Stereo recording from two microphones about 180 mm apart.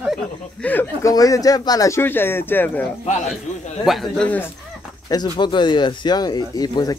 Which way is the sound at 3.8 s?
Centre (ahead or behind).